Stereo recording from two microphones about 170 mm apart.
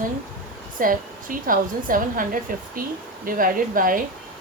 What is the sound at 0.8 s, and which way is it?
A woman's voice, 55° right (ahead or behind).